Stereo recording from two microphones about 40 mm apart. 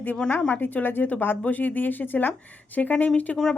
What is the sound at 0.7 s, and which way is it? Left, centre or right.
Speech, left.